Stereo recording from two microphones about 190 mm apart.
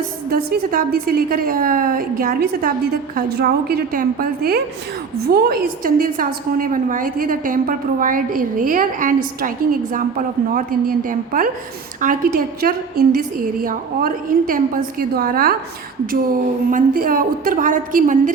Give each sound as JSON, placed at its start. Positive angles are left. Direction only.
{"t": 0.3, "sound": "a woman's voice", "side_deg": -50}